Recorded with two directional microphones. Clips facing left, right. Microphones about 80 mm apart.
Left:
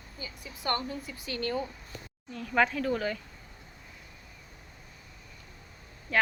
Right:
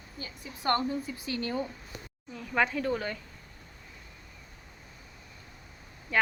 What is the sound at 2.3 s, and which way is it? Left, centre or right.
Speech, centre.